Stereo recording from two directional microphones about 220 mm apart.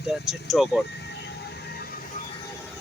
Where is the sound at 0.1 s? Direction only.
Centre (ahead or behind).